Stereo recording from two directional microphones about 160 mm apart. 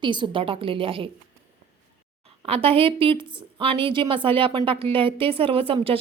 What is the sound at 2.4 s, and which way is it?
A woman's voice, 35° right (ahead or behind).